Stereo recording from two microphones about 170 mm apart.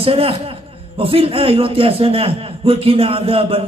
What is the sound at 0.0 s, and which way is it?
A man's voice, 35° right (ahead or behind).